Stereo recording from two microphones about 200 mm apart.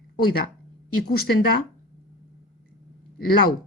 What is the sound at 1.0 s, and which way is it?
Speech, 50° left (ahead or behind).